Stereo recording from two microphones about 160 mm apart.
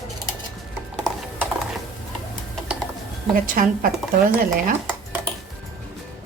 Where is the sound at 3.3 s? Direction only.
60° right (ahead or behind).